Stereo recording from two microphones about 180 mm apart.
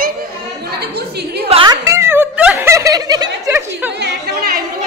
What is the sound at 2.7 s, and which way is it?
Snicker, 20° right (ahead or behind).